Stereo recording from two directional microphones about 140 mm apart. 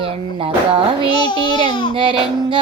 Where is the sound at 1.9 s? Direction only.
35° right (ahead or behind).